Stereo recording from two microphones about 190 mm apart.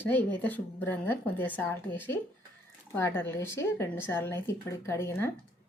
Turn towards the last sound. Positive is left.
turn(degrees=15)  # may be behind; listen again after turning